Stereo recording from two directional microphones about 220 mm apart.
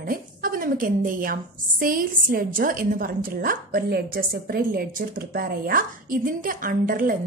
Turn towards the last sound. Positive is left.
turn(degrees=-40)  # may be behind; listen again after turning